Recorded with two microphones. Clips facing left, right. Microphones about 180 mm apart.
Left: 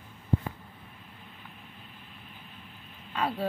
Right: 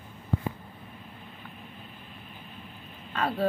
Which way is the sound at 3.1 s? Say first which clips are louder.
Right 2 dB; 10° left (ahead or behind).